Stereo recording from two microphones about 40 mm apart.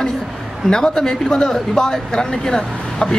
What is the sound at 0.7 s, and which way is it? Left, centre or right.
A man's voice, centre.